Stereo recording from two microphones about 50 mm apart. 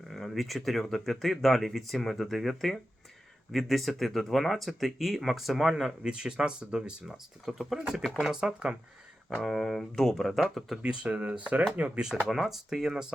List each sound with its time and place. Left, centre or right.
0.1 s speech: centre
6.0 s speech: centre
7.1 s speech: centre
7.8 s speech: centre
8.0 s speech: centre
8.3 s speech: centre
9.4 s speech: centre
10.8 s speech: right
12.3 s speech: centre